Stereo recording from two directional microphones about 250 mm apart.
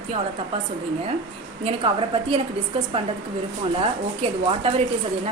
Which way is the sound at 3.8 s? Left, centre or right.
Right.